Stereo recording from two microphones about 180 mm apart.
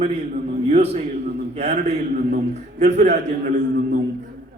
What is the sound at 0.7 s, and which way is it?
A man's voice, 35° right (ahead or behind).